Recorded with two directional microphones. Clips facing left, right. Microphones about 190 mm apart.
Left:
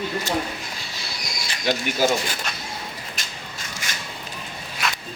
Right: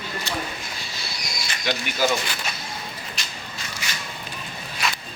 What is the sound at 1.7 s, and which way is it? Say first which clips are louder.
Speech: left 2 dB; 45° left (ahead or behind).